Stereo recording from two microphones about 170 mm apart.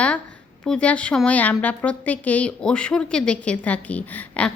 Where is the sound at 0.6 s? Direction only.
5° left (ahead or behind).